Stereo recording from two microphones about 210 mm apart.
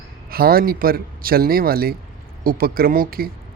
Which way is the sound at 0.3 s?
45° right (ahead or behind).